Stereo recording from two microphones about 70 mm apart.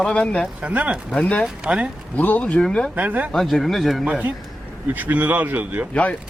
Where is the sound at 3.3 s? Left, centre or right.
Centre.